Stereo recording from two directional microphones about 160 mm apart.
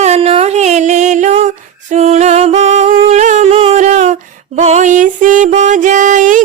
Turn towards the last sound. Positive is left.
turn(degrees=-50)  # may be behind; listen again after turning